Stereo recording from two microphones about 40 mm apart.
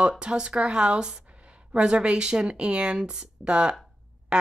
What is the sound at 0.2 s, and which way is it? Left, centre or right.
Speech, right.